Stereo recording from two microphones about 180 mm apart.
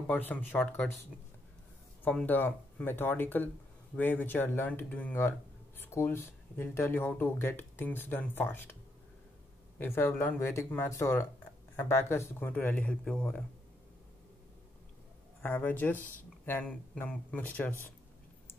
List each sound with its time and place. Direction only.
0.0 s speech: 10° left (ahead or behind)
2.0 s speech: 10° left (ahead or behind)
9.8 s speech: 10° left (ahead or behind)
15.4 s speech: 10° left (ahead or behind)